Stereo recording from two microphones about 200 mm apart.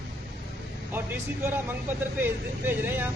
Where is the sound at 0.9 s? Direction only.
10° right (ahead or behind).